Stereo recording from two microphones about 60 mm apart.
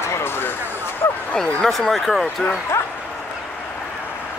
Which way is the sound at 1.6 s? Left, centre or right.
Centre.